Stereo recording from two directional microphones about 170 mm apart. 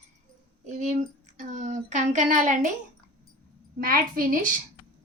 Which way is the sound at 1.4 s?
45° right (ahead or behind).